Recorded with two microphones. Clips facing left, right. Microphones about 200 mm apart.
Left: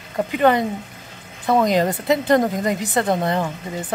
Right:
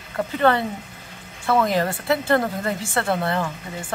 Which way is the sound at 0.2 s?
15° left (ahead or behind).